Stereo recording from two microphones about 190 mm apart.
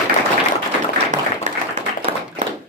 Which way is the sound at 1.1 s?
40° right (ahead or behind).